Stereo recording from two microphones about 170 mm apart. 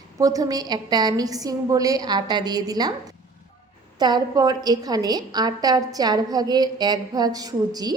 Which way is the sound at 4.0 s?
25° right (ahead or behind).